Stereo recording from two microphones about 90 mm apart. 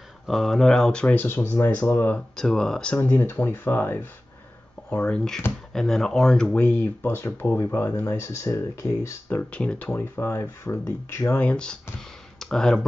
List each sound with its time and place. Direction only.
0.3 s speech: centre (ahead or behind)
1.1 s speech: 25° left (ahead or behind)
2.1 s speech: 5° left (ahead or behind)
3.0 s speech: 25° left (ahead or behind)
5.1 s speech: 5° left (ahead or behind)
6.5 s speech: 20° left (ahead or behind); by 9.0 s 40° left (ahead or behind)
9.3 s speech: 15° left (ahead or behind); by 11.3 s 30° left (ahead or behind)
11.3 s speech: 10° left (ahead or behind)